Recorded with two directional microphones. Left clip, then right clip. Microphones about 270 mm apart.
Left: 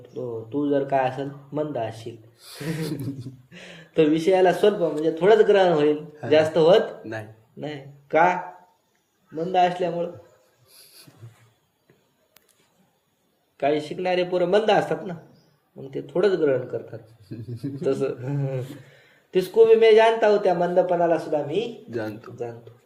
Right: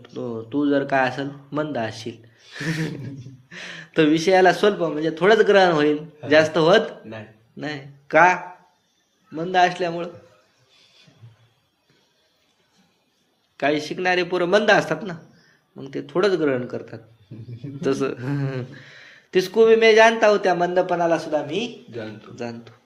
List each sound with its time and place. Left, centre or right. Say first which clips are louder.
0.1 s speech: right 2 dB; right
13.6 s speech: right 1 dB; right